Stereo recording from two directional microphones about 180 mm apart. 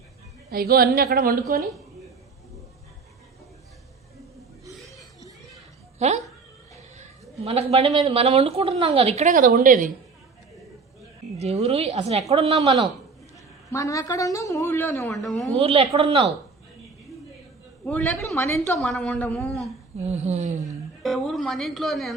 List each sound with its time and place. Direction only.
0.5 s a woman's voice: 60° right (ahead or behind)
6.0 s a woman's voice: 40° right (ahead or behind)
11.3 s a woman's voice: 35° right (ahead or behind)
13.7 s a woman's voice: 15° left (ahead or behind); by 15.5 s centre (ahead or behind)
15.5 s a woman's voice: 30° right (ahead or behind)
17.8 s a woman's voice: 10° left (ahead or behind)
20.0 s a woman's voice: 40° right (ahead or behind)
21.0 s speech: centre (ahead or behind)